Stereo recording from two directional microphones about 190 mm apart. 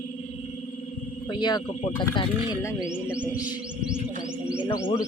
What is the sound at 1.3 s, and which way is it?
Speech, 25° left (ahead or behind).